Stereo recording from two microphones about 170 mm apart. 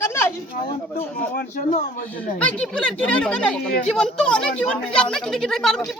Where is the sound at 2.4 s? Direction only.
5° left (ahead or behind).